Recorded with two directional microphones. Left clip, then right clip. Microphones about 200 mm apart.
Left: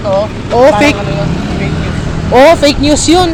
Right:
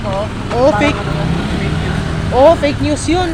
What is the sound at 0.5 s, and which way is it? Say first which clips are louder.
Speech: left 6 dB; 20° left (ahead or behind).